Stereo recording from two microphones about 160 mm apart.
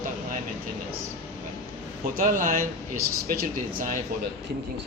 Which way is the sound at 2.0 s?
60° right (ahead or behind).